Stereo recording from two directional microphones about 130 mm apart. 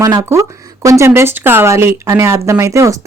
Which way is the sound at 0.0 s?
25° right (ahead or behind).